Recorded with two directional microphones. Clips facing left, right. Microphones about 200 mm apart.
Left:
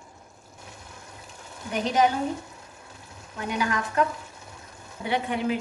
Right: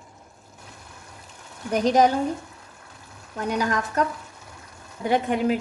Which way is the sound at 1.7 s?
40° right (ahead or behind).